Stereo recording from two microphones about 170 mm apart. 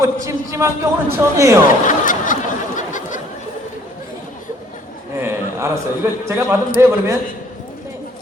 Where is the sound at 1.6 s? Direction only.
50° left (ahead or behind).